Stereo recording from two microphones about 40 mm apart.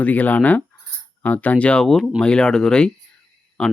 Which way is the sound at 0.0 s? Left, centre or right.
Left.